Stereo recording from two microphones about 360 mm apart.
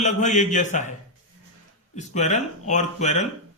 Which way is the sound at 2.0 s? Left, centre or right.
Centre.